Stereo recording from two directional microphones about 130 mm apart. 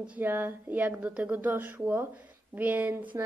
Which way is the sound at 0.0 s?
15° right (ahead or behind).